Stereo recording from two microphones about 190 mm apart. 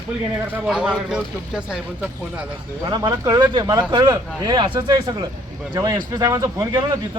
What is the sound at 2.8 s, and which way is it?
Speech, 20° right (ahead or behind).